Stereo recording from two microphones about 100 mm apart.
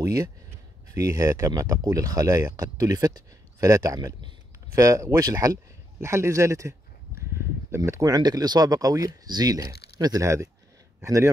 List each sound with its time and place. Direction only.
0.0 s a man's voice: 40° right (ahead or behind)